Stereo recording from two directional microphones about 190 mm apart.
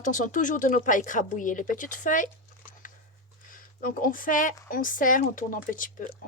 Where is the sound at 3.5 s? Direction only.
45° left (ahead or behind).